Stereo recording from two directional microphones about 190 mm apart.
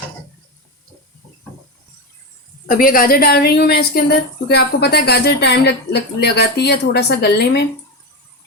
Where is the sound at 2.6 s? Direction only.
50° left (ahead or behind).